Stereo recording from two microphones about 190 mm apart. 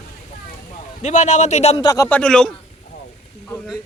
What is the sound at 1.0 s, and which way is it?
Speech, 40° left (ahead or behind).